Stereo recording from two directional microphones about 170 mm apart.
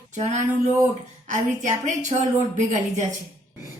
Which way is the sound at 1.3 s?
45° right (ahead or behind).